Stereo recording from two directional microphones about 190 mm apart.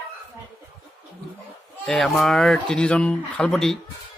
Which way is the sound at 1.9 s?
5° left (ahead or behind).